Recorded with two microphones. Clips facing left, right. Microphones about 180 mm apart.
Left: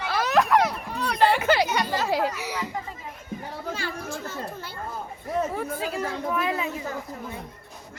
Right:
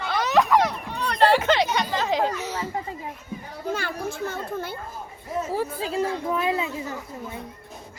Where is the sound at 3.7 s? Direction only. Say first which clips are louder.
Right 3 dB; 55° right (ahead or behind).